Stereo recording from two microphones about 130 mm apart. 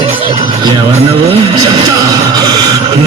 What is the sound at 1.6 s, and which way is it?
Music, 30° right (ahead or behind).